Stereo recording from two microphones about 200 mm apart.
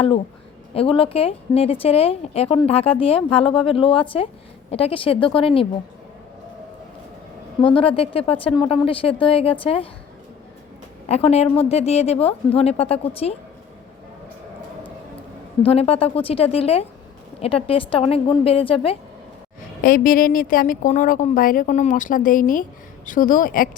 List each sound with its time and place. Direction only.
0.7 s speech: 30° left (ahead or behind)
7.7 s speech: 25° left (ahead or behind)
11.1 s a woman's voice: 30° left (ahead or behind)
15.6 s speech: 30° left (ahead or behind)
19.8 s a woman's voice: 45° left (ahead or behind)